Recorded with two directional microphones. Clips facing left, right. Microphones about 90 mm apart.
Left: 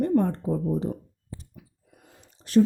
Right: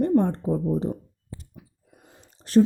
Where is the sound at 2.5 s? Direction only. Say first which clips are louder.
Right 2 dB; 35° right (ahead or behind).